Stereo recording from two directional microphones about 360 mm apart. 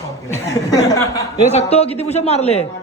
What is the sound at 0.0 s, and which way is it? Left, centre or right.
A woman's voice, centre.